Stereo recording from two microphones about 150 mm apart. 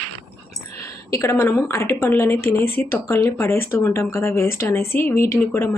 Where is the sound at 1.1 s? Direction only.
20° left (ahead or behind).